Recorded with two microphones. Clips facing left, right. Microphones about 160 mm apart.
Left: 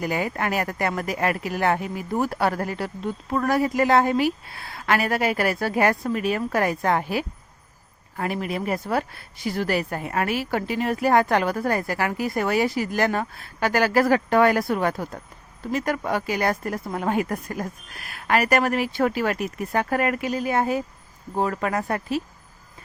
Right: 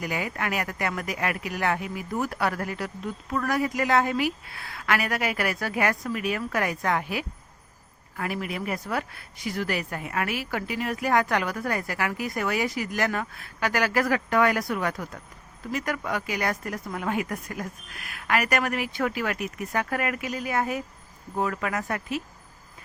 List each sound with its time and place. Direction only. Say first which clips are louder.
0.0 s speech: left 5 dB; 35° left (ahead or behind)